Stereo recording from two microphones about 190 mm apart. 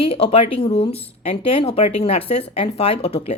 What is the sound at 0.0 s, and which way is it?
A woman's voice, 30° left (ahead or behind).